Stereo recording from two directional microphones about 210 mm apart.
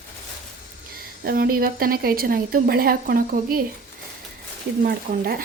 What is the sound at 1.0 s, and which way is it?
A woman's voice, 45° right (ahead or behind).